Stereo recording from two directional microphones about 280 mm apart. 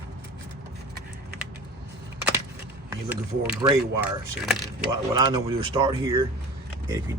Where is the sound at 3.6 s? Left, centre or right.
Centre.